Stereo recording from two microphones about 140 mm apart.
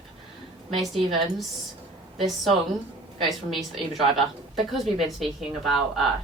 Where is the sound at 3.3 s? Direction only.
Centre (ahead or behind).